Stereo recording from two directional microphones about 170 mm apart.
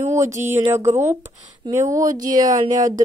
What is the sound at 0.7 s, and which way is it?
Speech, 15° right (ahead or behind).